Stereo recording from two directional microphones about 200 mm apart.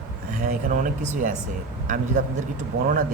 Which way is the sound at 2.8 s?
45° right (ahead or behind).